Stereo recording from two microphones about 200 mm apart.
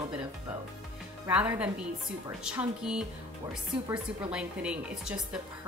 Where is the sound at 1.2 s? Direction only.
5° right (ahead or behind).